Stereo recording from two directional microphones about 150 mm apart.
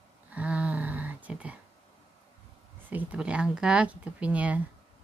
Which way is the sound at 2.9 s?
10° right (ahead or behind).